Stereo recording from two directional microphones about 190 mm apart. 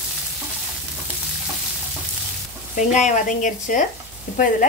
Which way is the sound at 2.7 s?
40° left (ahead or behind).